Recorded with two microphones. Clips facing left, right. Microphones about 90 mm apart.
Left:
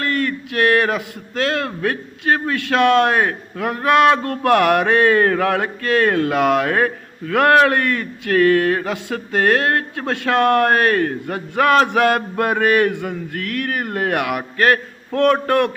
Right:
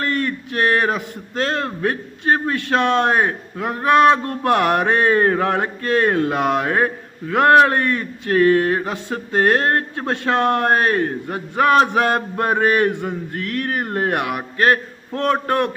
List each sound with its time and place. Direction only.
0.2 s a man's voice: 30° right (ahead or behind)